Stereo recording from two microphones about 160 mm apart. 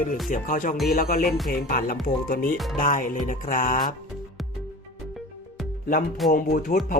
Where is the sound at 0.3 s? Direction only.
55° left (ahead or behind).